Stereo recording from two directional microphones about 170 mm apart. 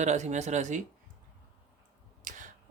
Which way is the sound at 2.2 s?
50° right (ahead or behind).